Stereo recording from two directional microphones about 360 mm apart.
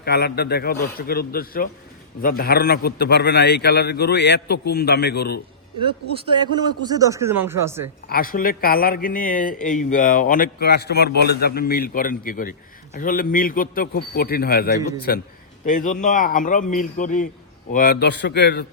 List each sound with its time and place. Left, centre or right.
0.0 s a man's voice: left
6.8 s speech: centre
8.0 s a man's voice: left